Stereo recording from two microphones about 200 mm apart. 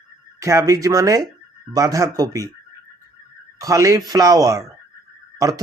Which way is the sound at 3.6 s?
15° right (ahead or behind).